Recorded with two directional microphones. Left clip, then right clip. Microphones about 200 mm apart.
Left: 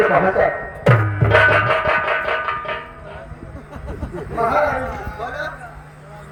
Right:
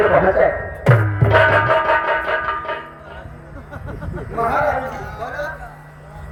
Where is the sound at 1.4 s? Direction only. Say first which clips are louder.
Right 1 dB; 15° left (ahead or behind).